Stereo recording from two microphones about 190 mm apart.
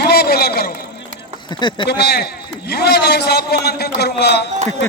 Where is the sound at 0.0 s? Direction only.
55° left (ahead or behind).